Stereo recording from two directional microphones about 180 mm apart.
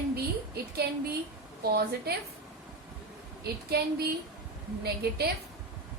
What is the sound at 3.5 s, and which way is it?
Speech, 60° right (ahead or behind).